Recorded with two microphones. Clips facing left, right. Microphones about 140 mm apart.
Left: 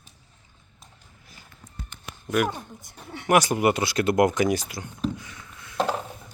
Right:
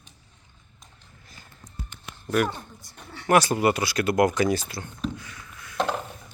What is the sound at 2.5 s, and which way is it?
Speech, 15° left (ahead or behind).